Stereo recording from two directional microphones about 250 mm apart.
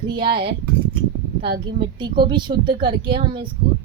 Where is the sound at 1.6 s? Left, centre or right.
Centre.